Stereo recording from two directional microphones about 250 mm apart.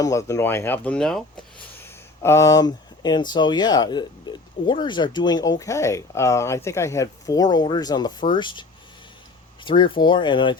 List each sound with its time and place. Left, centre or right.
0.0 s speech: centre
9.6 s speech: centre